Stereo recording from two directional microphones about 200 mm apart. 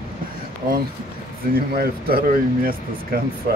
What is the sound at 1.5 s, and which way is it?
Speech, 50° right (ahead or behind).